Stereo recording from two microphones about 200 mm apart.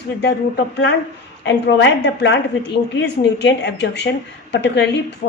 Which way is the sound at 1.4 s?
60° left (ahead or behind).